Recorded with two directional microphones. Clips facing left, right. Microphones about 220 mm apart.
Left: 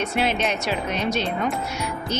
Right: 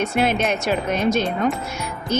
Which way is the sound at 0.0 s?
50° right (ahead or behind).